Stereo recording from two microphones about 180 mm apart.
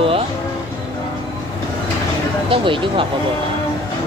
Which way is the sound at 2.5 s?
30° right (ahead or behind).